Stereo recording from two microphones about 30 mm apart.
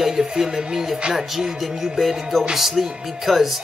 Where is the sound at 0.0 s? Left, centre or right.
Centre.